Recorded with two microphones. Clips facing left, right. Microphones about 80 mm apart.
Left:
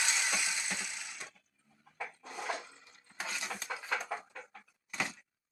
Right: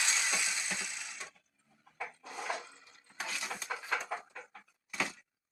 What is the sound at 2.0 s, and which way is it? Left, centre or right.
Wood, centre.